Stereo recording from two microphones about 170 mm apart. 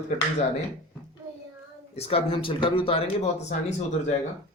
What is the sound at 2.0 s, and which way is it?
Speech, 35° left (ahead or behind).